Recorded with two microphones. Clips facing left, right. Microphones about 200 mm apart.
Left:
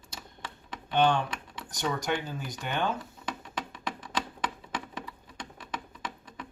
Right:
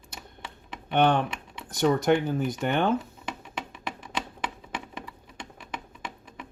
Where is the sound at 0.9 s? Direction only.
60° right (ahead or behind).